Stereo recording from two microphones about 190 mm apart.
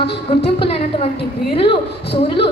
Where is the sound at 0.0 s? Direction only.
30° left (ahead or behind).